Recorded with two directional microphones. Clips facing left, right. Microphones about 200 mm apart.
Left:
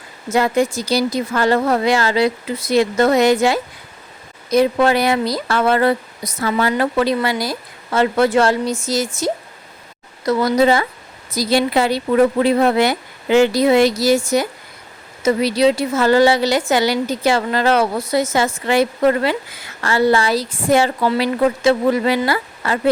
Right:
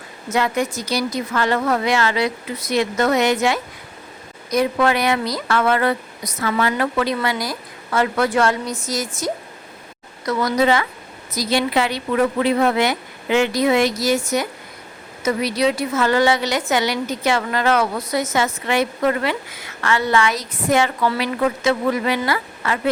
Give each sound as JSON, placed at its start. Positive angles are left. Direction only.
{"t": 0.3, "sound": "a woman's voice", "side_deg": 30}